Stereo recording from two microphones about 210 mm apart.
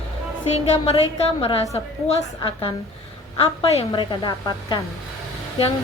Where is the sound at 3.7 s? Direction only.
25° left (ahead or behind).